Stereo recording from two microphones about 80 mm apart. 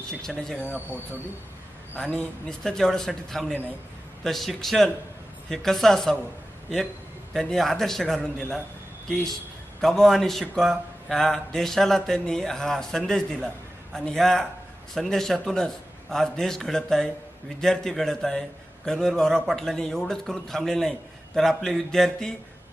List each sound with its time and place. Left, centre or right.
0.1 s speech: centre
0.7 s speech: right
2.0 s speech: centre
7.3 s speech: centre